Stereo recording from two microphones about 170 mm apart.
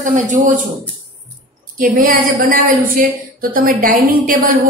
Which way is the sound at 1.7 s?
55° right (ahead or behind).